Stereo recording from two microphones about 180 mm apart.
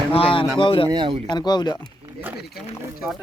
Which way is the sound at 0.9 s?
25° right (ahead or behind).